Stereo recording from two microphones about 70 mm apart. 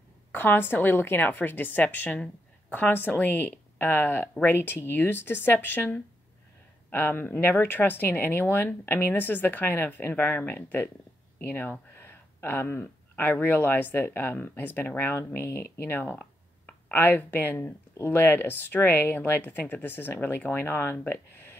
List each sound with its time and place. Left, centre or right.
0.3 s speech: left